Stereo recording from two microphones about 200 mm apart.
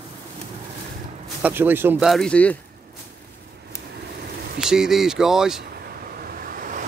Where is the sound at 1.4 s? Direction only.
10° right (ahead or behind); by 2.5 s 5° left (ahead or behind).